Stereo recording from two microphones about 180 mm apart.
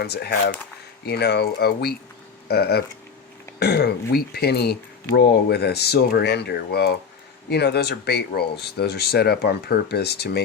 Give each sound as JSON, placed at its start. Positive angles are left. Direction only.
{"t": 0.0, "sound": "speech", "side_deg": 65}